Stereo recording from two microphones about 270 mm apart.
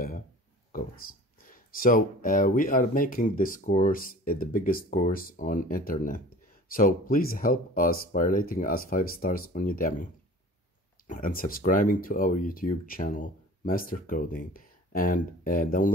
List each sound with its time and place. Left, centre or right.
1.5 s speech: left
11.1 s speech: left